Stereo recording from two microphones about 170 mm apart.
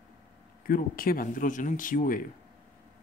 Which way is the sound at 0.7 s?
55° left (ahead or behind).